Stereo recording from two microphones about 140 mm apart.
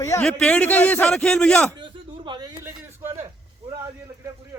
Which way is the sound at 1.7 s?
35° right (ahead or behind).